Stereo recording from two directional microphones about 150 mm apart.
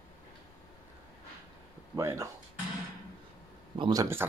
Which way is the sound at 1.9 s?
20° right (ahead or behind).